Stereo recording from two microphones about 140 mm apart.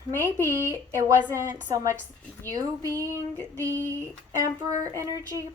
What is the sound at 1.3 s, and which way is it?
A woman's voice, 20° right (ahead or behind).